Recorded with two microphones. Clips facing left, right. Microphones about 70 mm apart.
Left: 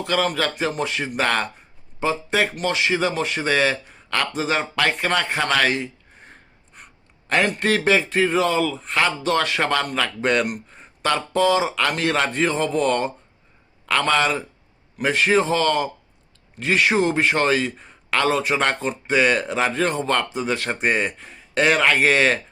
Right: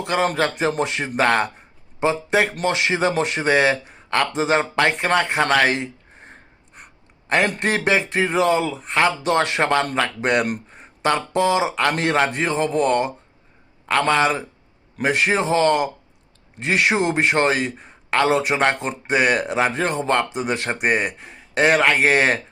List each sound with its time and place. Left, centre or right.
0.0 s speech: right
3.9 s a sound: right
4.3 s speech: right
7.3 s speech: right
12.5 s speech: right
17.7 s a sound: right
18.2 s speech: right